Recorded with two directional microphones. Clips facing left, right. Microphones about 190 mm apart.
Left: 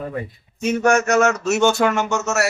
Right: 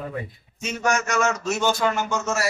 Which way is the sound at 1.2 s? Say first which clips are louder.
Left 6 dB; 70° left (ahead or behind).